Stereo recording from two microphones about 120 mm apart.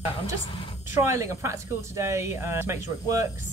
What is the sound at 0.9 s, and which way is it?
Speech, 20° right (ahead or behind).